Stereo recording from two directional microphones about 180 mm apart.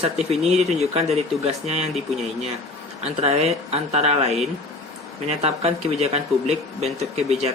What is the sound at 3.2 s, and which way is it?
Speech, 35° right (ahead or behind).